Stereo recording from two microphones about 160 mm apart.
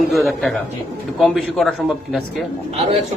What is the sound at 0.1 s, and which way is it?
A man's voice, centre (ahead or behind).